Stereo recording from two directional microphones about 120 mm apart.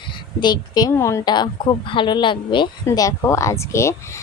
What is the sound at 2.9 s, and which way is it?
Speech, 25° left (ahead or behind).